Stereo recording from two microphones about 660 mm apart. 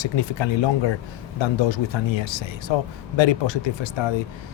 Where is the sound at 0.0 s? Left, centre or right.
Left.